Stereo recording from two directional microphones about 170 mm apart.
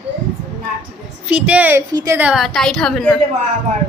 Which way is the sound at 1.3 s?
10° right (ahead or behind).